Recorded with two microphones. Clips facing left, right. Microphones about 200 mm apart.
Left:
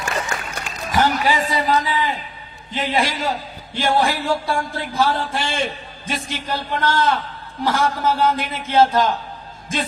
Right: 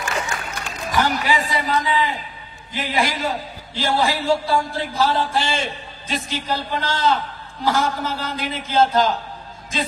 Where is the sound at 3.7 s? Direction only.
50° left (ahead or behind).